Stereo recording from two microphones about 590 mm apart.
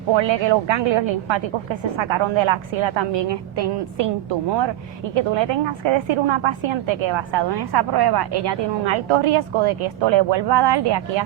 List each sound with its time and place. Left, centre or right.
0.1 s a woman's voice: right